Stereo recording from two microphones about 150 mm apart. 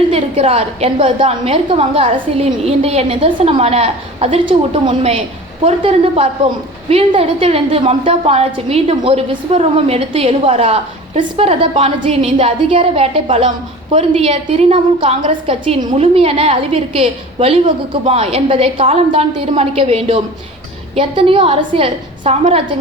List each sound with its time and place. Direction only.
0.1 s a woman's voice: 40° right (ahead or behind)